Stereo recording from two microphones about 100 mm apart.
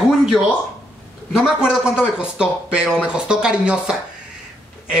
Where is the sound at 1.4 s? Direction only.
10° right (ahead or behind).